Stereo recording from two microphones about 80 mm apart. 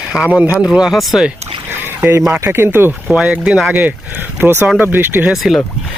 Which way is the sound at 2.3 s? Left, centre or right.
Right.